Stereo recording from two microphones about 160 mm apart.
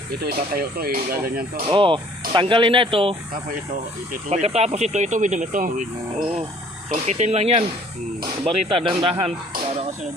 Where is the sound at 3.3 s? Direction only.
60° right (ahead or behind).